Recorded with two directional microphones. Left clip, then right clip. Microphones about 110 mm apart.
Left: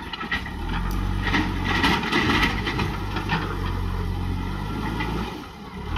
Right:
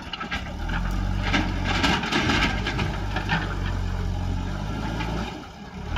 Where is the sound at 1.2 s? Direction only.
35° right (ahead or behind).